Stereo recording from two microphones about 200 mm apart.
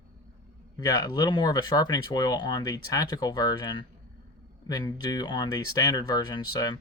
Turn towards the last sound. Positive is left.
turn(degrees=20)  # may be behind; listen again after turning